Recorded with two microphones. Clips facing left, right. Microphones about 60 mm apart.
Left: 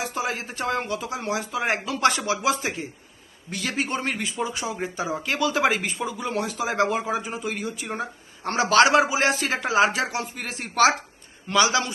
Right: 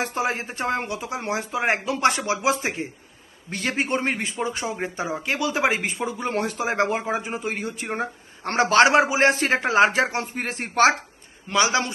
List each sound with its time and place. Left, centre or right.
0.0 s a man's voice: right; by 1.1 s centre
1.1 s speech: right
5.1 s speech: right
11.5 s speech: right